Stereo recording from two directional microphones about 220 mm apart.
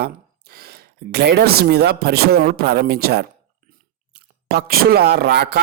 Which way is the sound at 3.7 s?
45° right (ahead or behind).